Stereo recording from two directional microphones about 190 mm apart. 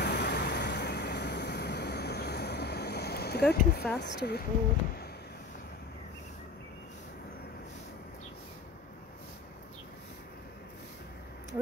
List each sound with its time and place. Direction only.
0.0 s vehicle: 60° left (ahead or behind)
4.0 s speech: 60° left (ahead or behind)